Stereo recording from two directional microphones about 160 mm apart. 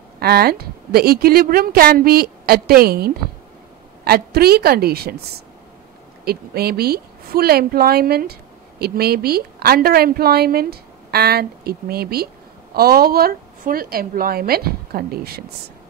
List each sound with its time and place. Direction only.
0.2 s a woman's voice: 75° right (ahead or behind)